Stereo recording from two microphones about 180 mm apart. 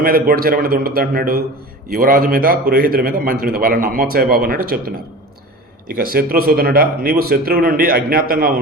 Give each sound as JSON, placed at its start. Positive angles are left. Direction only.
{"t": 0.0, "sound": "a man's voice", "side_deg": -55}